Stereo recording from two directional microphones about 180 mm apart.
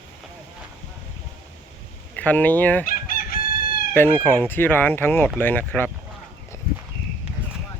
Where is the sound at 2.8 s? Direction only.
55° left (ahead or behind).